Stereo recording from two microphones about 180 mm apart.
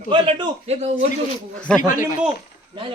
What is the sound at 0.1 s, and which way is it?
Speech, 30° right (ahead or behind).